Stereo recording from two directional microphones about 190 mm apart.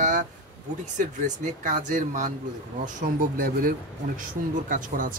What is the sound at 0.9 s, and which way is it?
Speech, 40° right (ahead or behind).